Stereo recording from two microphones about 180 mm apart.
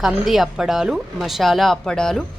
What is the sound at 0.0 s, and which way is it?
A woman's voice, centre (ahead or behind).